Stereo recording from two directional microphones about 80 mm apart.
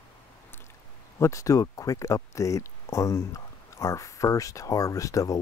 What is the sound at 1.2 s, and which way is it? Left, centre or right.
Speech, left.